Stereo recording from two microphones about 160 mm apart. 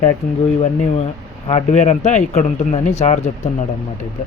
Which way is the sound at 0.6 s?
40° left (ahead or behind).